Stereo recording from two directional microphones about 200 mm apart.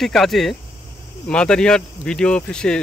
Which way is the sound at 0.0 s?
Centre (ahead or behind).